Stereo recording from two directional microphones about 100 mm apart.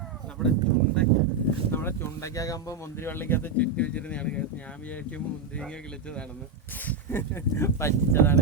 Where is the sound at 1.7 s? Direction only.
25° left (ahead or behind).